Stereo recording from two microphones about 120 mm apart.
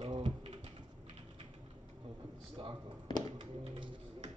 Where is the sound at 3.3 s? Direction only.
45° right (ahead or behind).